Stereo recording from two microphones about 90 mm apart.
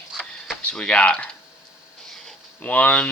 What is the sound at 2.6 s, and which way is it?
Speech, 15° left (ahead or behind).